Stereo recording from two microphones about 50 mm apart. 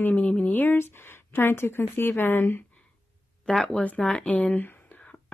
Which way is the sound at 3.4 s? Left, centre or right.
Centre.